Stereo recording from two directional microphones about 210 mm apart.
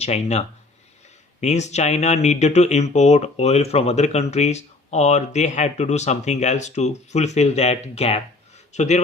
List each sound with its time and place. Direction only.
0.0 s speech: 30° left (ahead or behind)